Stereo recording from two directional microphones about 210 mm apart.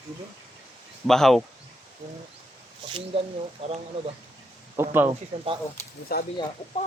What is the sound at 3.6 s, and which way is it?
Speech, 30° right (ahead or behind).